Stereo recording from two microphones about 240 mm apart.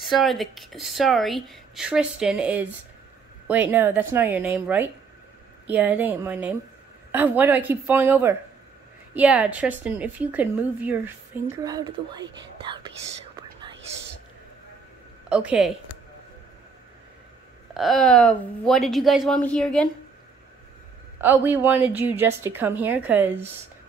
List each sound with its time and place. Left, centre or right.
0.0 s a woman's voice: centre
13.6 s whispering: centre
15.2 s a woman's voice: centre
17.7 s speech: centre
21.2 s a woman's voice: centre